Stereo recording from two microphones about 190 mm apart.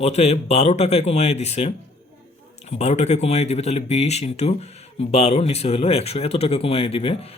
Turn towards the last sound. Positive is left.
turn(degrees=30)  # may be behind; listen again after turning